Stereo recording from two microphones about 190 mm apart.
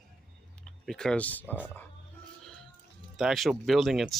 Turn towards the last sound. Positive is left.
turn(degrees=0)  # may be behind; listen again after turning